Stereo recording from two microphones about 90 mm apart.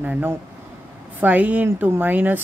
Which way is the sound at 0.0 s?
20° right (ahead or behind).